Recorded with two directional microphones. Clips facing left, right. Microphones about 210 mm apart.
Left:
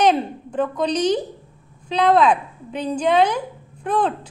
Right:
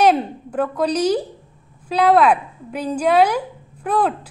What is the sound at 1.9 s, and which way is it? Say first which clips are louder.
A woman's voice: right 2 dB; 10° right (ahead or behind).